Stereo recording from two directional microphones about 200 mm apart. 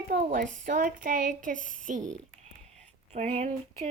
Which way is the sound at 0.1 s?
45° right (ahead or behind).